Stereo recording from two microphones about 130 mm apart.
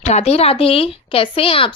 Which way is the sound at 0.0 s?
55° left (ahead or behind).